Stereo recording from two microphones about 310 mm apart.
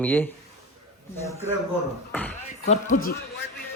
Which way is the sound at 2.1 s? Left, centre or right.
Centre.